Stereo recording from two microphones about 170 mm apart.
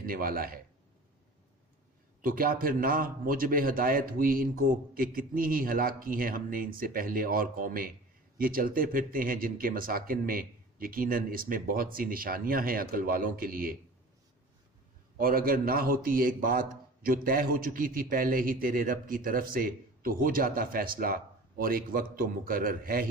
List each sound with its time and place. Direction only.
0.0 s a man's voice: 55° right (ahead or behind)
2.2 s a man's voice: 55° right (ahead or behind)
15.2 s a man's voice: 60° right (ahead or behind)